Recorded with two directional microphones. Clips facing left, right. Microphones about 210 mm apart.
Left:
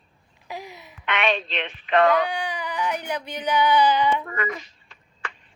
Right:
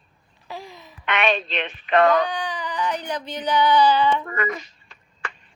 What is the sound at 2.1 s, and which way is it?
Speech, 10° left (ahead or behind).